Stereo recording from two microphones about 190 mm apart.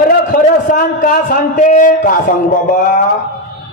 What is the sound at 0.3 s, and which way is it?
A man's voice, 45° left (ahead or behind).